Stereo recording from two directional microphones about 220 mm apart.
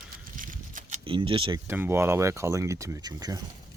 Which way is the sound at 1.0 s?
25° right (ahead or behind).